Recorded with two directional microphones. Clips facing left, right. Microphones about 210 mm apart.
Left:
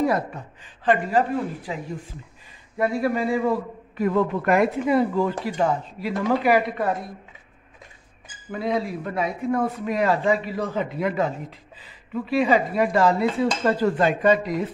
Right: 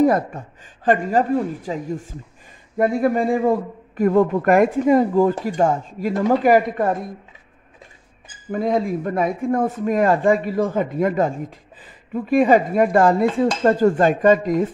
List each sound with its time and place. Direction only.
0.0 s a woman's voice: 45° right (ahead or behind)
8.5 s speech: 45° right (ahead or behind)